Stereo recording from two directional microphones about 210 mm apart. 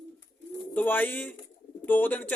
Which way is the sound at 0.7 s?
10° left (ahead or behind).